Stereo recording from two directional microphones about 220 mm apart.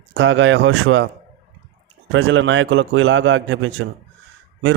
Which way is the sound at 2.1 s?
60° right (ahead or behind).